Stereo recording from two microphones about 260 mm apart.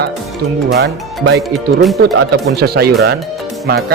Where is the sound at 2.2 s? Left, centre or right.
Right.